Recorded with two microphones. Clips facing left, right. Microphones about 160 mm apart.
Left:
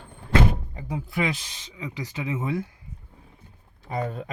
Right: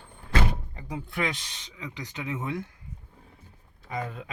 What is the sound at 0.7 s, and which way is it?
Speech, 10° left (ahead or behind).